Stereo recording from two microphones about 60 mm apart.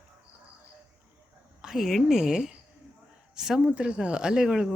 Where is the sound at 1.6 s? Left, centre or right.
Centre.